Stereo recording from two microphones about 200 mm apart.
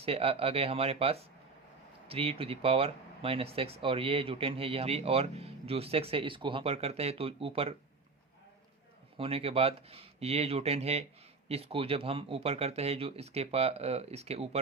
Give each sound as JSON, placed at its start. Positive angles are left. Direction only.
{"t": 0.0, "sound": "speech", "side_deg": -30}
{"t": 9.1, "sound": "speech", "side_deg": -30}